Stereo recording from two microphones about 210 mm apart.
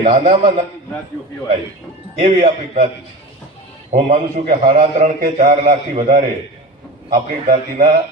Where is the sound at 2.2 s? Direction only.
30° right (ahead or behind).